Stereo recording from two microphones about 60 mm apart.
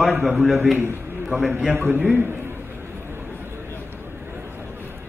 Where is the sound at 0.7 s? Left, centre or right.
Right.